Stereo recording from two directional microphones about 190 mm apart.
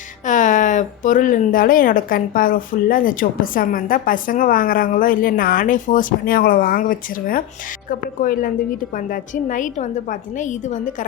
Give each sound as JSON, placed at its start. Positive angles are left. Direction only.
{"t": 0.3, "sound": "a woman's voice", "side_deg": 40}